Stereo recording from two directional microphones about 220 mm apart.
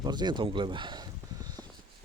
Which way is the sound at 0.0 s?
20° right (ahead or behind).